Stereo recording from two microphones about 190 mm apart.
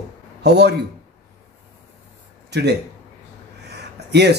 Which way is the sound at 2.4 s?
60° right (ahead or behind).